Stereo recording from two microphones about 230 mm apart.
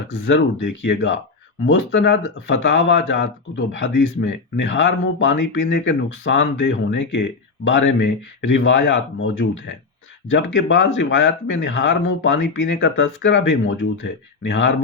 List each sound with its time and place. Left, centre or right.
0.1 s speech: left